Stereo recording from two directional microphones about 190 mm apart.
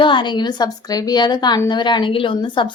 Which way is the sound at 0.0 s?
25° left (ahead or behind).